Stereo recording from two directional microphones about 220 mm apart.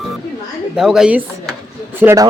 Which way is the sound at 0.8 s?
5° right (ahead or behind).